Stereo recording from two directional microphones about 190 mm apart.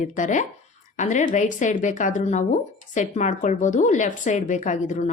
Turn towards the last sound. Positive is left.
turn(degrees=40)  # may be behind; listen again after turning